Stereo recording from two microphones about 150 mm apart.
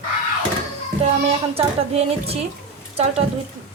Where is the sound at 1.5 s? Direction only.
45° right (ahead or behind).